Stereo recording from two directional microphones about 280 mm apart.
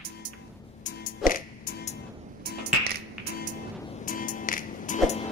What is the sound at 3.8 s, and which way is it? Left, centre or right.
Music, left.